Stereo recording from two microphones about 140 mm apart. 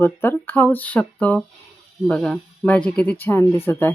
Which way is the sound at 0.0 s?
15° left (ahead or behind).